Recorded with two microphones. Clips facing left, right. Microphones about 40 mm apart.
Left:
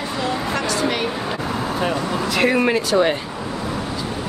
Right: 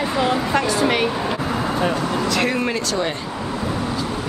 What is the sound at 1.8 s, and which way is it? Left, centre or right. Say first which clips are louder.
Speech: even; centre.